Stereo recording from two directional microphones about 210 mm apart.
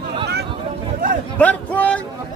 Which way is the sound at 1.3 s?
5° left (ahead or behind).